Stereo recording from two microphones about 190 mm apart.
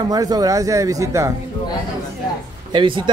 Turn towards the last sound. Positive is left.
turn(degrees=-25)  # may be behind; listen again after turning